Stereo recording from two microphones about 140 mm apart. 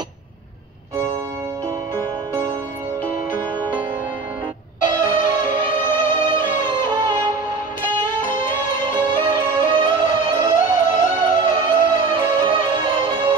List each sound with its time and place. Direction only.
4.8 s music: 35° right (ahead or behind)